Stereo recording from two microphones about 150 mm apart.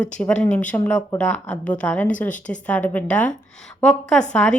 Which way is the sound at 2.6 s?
10° left (ahead or behind).